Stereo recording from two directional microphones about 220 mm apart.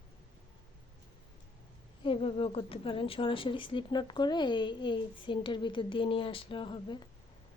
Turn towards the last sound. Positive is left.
turn(degrees=20)  # may be behind; listen again after turning